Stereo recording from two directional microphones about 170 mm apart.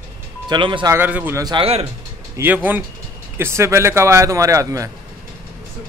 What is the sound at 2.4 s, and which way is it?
A man's voice, 10° right (ahead or behind).